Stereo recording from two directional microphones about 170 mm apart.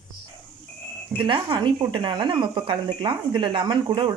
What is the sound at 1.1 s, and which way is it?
Speech, 30° right (ahead or behind).